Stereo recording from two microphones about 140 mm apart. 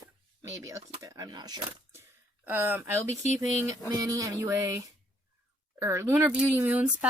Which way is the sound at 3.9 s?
25° right (ahead or behind).